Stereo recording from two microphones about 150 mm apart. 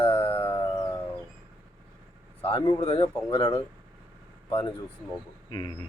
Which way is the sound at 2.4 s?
35° left (ahead or behind).